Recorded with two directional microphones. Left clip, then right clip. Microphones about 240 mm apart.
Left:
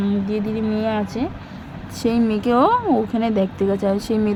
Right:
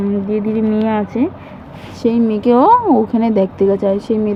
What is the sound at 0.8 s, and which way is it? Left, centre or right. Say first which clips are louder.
Speech: right 4 dB; left.